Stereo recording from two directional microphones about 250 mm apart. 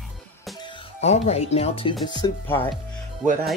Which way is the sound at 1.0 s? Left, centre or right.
Left.